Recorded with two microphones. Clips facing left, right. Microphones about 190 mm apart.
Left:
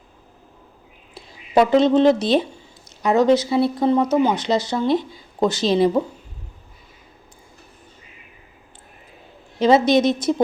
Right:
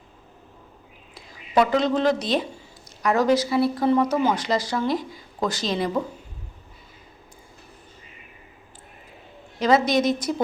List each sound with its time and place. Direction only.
1.1 s speech: 30° left (ahead or behind)
9.6 s speech: 25° left (ahead or behind)